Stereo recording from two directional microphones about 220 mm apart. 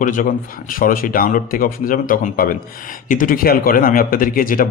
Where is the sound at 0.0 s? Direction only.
35° left (ahead or behind).